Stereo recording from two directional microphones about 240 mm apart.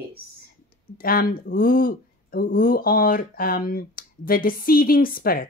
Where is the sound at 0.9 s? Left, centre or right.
Left.